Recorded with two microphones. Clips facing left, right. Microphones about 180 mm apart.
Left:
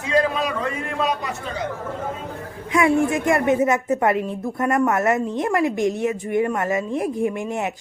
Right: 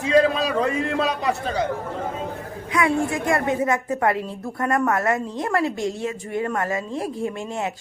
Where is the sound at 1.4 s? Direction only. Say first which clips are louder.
Right 5 dB; 40° right (ahead or behind).